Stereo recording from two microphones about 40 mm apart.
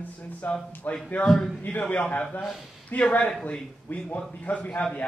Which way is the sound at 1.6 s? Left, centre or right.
Left.